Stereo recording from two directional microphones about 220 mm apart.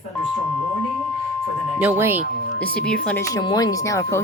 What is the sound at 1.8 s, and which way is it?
Speech, 10° right (ahead or behind).